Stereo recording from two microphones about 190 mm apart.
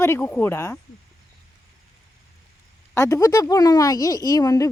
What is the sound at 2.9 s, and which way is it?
Speech, 15° left (ahead or behind).